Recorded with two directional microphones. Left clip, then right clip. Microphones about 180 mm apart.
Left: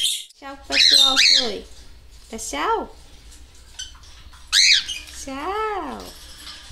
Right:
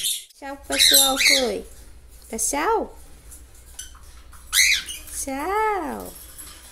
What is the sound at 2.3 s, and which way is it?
Speech, 10° right (ahead or behind).